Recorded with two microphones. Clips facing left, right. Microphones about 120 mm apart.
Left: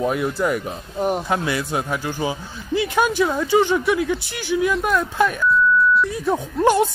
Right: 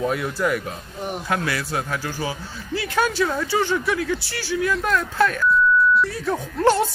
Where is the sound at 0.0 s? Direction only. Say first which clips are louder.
Left 2 dB; 15° left (ahead or behind).